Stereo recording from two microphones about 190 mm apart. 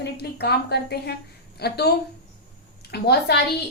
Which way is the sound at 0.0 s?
60° left (ahead or behind).